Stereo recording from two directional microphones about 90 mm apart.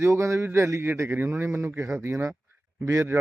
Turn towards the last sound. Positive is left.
turn(degrees=-35)  # may be behind; listen again after turning